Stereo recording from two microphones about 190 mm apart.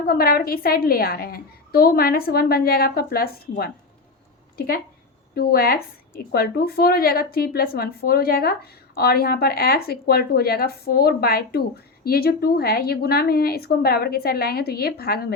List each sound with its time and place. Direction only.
0.1 s a woman's voice: 50° left (ahead or behind)